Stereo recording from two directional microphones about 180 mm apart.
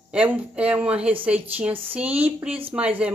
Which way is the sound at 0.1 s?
5° right (ahead or behind).